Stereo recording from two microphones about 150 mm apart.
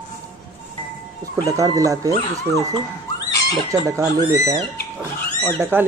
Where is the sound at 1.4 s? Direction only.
20° right (ahead or behind).